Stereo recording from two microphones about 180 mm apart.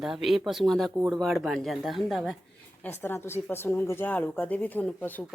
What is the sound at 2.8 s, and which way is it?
Speech, 10° left (ahead or behind).